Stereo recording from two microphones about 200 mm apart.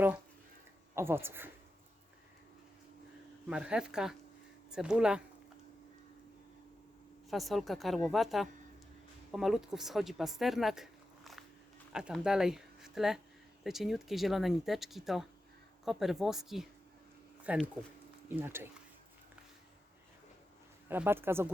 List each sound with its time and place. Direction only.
0.9 s speech: 10° right (ahead or behind)
3.4 s speech: 5° right (ahead or behind)
7.3 s speech: centre (ahead or behind)
20.8 s speech: 10° right (ahead or behind)